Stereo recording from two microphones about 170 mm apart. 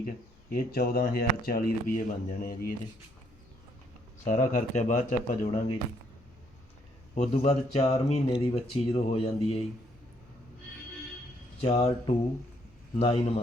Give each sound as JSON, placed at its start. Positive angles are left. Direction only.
{"t": 0.5, "sound": "speech", "side_deg": 60}
{"t": 4.2, "sound": "speech", "side_deg": 50}
{"t": 7.2, "sound": "speech", "side_deg": 40}
{"t": 11.6, "sound": "speech", "side_deg": 35}